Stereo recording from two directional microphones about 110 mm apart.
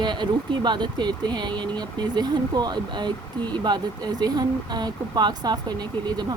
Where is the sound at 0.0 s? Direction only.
45° right (ahead or behind).